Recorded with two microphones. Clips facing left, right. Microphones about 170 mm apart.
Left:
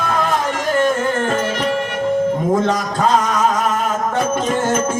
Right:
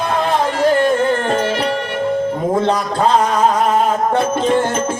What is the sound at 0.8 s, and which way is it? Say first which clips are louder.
Music: right 2 dB; 45° left (ahead or behind).